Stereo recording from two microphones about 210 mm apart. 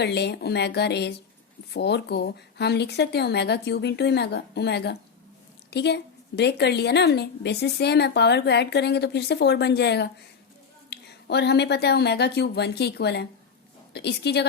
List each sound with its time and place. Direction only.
0.0 s a woman's voice: 55° left (ahead or behind)